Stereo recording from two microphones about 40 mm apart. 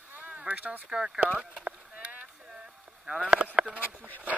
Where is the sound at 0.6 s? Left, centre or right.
Right.